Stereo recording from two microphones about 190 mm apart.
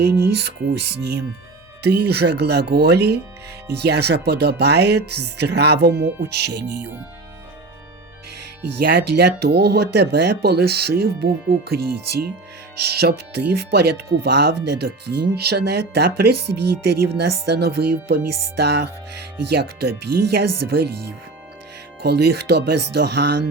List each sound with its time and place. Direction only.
0.0 s speech: 60° right (ahead or behind)
8.8 s speech: 60° right (ahead or behind)